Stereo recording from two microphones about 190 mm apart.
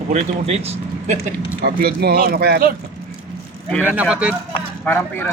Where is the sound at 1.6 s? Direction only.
55° right (ahead or behind).